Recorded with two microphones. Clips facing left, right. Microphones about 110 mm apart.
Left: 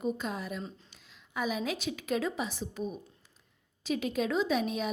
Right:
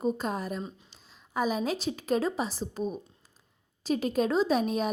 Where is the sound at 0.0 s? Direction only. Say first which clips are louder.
Right 4 dB; 40° right (ahead or behind).